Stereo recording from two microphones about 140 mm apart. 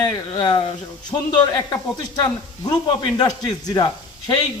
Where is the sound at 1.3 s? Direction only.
30° left (ahead or behind).